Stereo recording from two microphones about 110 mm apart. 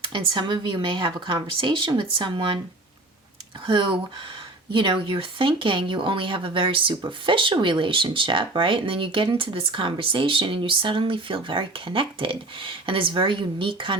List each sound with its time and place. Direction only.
0.0 s speech: 50° right (ahead or behind)
3.7 s speech: 50° right (ahead or behind)